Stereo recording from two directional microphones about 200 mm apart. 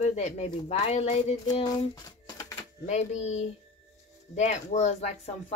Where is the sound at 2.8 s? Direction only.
35° left (ahead or behind).